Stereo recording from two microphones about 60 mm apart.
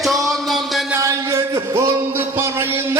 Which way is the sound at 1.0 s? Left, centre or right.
Right.